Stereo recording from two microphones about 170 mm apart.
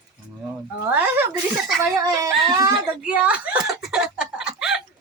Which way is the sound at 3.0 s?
10° right (ahead or behind).